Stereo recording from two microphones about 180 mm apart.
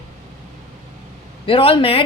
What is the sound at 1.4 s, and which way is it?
Speech, 30° left (ahead or behind).